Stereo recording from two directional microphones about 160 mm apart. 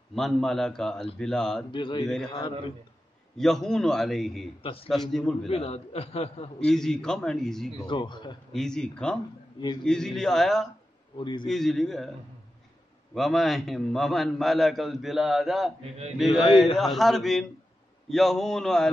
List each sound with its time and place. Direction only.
0.1 s a man's voice: centre (ahead or behind)
1.7 s speech: 30° left (ahead or behind)
2.0 s a man's voice: 5° left (ahead or behind)
3.3 s a man's voice: centre (ahead or behind)
5.5 s a man's voice: 40° left (ahead or behind)
6.6 s a man's voice: 5° left (ahead or behind)
7.8 s speech: 30° left (ahead or behind)
8.5 s a man's voice: 5° left (ahead or behind)
11.1 s speech: 30° left (ahead or behind)
11.4 s a man's voice: centre (ahead or behind)
13.1 s a man's voice: centre (ahead or behind)